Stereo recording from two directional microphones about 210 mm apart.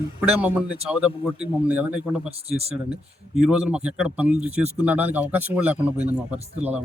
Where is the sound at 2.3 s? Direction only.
30° right (ahead or behind).